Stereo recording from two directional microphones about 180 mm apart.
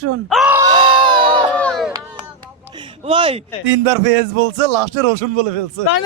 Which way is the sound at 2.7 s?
25° right (ahead or behind).